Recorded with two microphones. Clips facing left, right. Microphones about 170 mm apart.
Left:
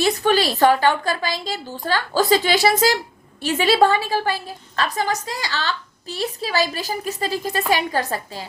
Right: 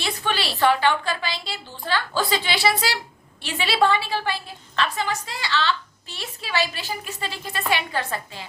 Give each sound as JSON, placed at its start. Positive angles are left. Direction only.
{"t": 0.0, "sound": "a woman's voice", "side_deg": 45}